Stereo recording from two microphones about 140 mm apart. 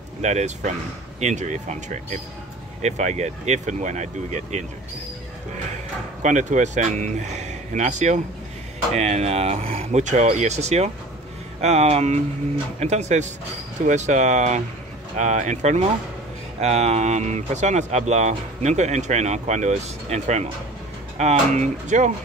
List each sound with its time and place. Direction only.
0.2 s speech: 55° right (ahead or behind)
6.2 s speech: 60° right (ahead or behind)